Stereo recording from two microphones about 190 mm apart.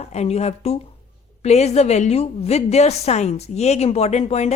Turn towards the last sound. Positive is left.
turn(degrees=35)  # may be behind; listen again after turning